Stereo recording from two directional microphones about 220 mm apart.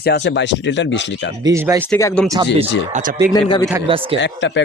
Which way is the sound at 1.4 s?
15° right (ahead or behind).